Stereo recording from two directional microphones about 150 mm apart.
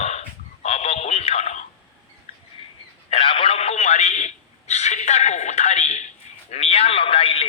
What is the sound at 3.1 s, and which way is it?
Radio, 35° left (ahead or behind).